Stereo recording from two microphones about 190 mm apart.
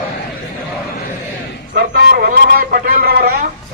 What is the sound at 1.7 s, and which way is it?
A man's voice, 55° right (ahead or behind).